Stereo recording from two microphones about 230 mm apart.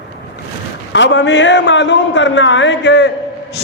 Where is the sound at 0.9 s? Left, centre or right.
Left.